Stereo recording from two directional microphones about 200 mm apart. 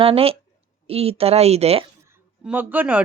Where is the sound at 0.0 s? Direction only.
30° right (ahead or behind).